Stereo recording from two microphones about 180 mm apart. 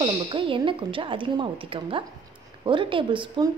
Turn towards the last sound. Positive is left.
turn(degrees=-25)  # may be behind; listen again after turning